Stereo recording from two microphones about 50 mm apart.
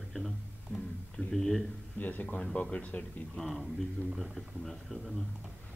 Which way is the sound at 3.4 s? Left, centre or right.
Centre.